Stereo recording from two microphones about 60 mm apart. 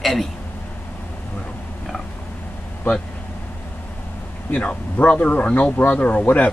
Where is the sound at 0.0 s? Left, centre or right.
Centre.